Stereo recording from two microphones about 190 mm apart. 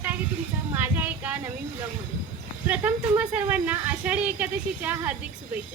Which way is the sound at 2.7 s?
10° right (ahead or behind).